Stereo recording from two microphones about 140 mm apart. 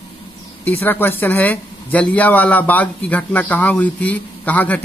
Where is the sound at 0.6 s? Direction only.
15° left (ahead or behind).